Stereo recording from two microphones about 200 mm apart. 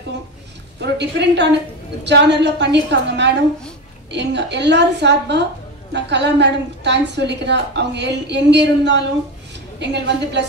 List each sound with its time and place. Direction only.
0.7 s a woman's voice: 60° right (ahead or behind)